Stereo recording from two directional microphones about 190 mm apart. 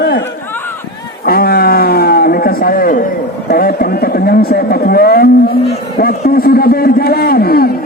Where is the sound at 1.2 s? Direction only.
50° left (ahead or behind).